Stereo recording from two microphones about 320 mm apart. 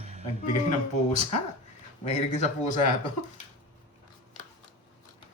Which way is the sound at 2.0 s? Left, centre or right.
Left.